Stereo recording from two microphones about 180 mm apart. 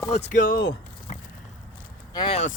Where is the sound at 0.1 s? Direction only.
45° left (ahead or behind).